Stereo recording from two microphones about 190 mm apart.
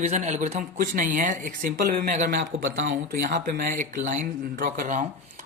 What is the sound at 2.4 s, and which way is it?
Speech, 90° right.